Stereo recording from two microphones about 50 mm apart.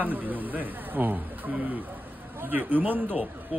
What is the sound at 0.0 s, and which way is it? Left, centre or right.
Speech, right.